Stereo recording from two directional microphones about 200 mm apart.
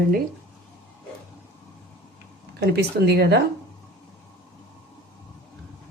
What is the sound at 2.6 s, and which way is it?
Speech, 55° right (ahead or behind).